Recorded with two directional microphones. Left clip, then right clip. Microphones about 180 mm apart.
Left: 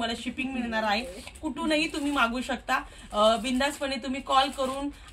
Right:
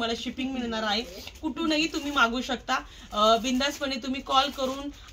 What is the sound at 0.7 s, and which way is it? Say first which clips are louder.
A woman's voice: left 2 dB; 20° left (ahead or behind).